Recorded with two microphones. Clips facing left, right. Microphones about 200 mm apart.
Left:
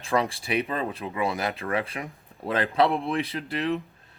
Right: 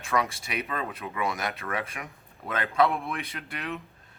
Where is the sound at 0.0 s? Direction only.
30° left (ahead or behind).